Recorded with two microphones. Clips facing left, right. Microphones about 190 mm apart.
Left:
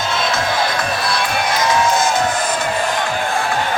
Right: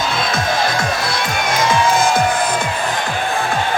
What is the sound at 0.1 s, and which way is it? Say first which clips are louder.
Music: even; 55° right (ahead or behind).